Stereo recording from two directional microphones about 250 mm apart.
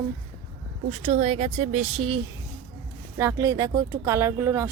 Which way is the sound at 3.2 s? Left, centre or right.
Centre.